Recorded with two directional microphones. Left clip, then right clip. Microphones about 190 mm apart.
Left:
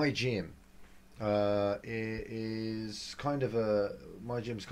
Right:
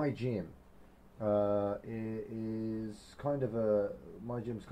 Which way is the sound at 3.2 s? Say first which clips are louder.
Left 1 dB; 25° left (ahead or behind).